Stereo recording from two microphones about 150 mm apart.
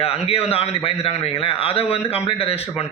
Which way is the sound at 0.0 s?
40° left (ahead or behind).